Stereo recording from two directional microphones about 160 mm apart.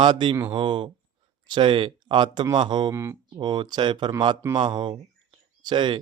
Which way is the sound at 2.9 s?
15° right (ahead or behind).